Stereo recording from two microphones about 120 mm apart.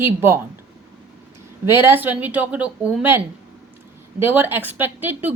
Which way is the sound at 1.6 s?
20° right (ahead or behind).